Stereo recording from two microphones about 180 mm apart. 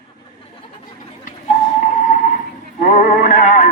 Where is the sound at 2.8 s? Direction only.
45° left (ahead or behind).